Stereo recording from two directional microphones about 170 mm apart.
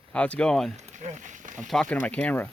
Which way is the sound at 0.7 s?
45° right (ahead or behind).